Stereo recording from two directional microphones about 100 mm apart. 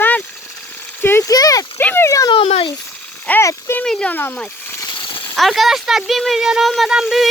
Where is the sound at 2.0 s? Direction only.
35° left (ahead or behind).